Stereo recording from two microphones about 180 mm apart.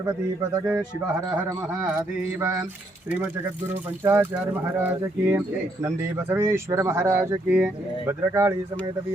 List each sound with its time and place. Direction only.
0.6 s speech: 15° right (ahead or behind)
4.0 s speech: 15° right (ahead or behind)